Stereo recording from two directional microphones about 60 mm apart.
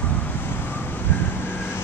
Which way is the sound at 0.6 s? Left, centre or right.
Left.